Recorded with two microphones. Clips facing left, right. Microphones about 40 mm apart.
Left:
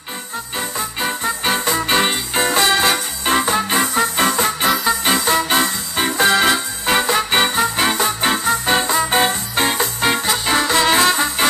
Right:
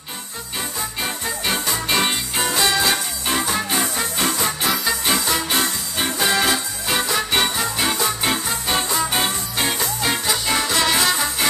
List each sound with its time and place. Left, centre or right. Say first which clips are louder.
1.0 s music: left 6 dB; left